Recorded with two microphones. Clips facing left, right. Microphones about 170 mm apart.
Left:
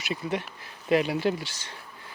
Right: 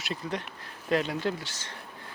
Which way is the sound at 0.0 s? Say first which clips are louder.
Left 4 dB; 5° left (ahead or behind).